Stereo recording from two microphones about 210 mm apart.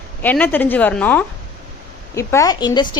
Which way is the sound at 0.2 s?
10° left (ahead or behind).